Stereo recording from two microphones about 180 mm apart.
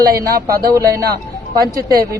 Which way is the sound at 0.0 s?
20° right (ahead or behind).